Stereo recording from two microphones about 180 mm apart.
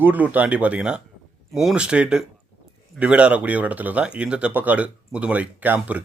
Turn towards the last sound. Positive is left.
turn(degrees=-10)  # may be behind; listen again after turning